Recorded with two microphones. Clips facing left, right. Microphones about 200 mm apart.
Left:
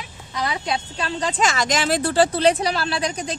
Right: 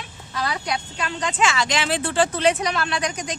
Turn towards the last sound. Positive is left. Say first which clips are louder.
# left 1 dB
turn(degrees=30)  # may be behind; listen again after turning